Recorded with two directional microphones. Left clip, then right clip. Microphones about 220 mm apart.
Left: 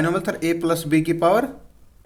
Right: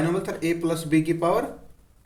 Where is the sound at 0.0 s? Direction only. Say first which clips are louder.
Left 4 dB; 45° left (ahead or behind).